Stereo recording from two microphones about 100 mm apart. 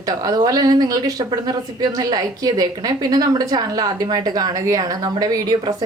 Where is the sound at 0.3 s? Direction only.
40° right (ahead or behind).